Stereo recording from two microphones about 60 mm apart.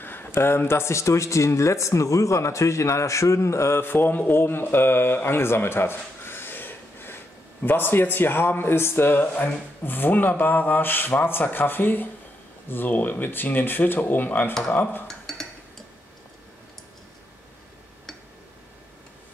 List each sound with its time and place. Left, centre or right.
0.0 s speech: left
3.8 s speech: left
15.0 s dishes: centre